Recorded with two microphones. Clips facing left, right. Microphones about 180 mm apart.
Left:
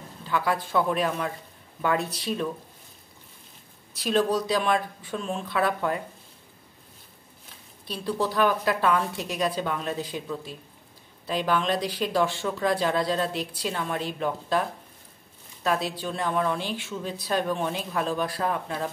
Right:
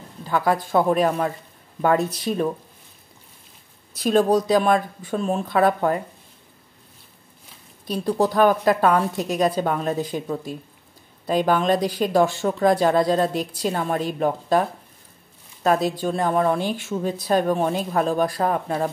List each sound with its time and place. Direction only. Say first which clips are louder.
0.3 s speech: right 5 dB; 45° right (ahead or behind)
3.9 s speech: right 6 dB; 45° right (ahead or behind)
7.8 s speech: right 7 dB; 45° right (ahead or behind)